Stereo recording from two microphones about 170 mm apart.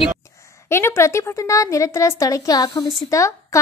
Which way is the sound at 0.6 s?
15° left (ahead or behind).